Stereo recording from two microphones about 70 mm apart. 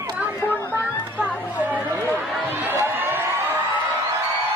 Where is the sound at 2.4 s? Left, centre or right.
Right.